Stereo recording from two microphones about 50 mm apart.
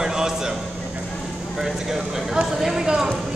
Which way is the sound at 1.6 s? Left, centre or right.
Centre.